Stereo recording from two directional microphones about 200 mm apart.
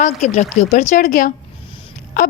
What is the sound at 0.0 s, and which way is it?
Speech, 35° left (ahead or behind).